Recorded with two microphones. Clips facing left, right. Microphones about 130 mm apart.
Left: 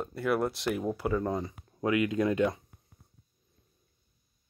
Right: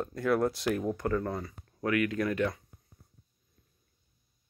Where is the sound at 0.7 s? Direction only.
10° left (ahead or behind).